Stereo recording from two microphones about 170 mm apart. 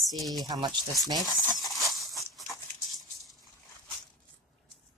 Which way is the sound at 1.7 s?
Centre (ahead or behind).